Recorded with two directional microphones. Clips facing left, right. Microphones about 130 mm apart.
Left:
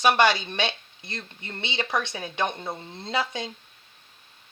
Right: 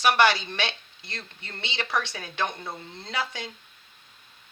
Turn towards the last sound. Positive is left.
turn(degrees=25)  # may be behind; listen again after turning